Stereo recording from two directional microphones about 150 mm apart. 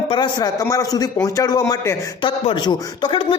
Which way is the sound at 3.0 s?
35° left (ahead or behind).